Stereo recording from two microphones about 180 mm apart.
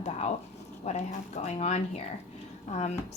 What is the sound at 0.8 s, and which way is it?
A woman's voice, 40° left (ahead or behind).